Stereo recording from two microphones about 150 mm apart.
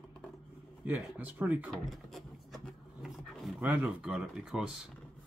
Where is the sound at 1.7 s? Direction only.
Centre (ahead or behind).